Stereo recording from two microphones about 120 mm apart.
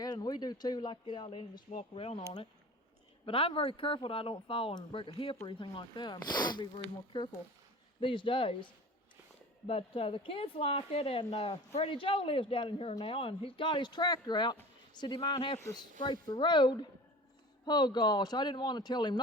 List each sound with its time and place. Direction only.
0.0 s speech: 35° left (ahead or behind)
2.0 s speech: 55° left (ahead or behind)
3.2 s a woman's voice: 50° left (ahead or behind)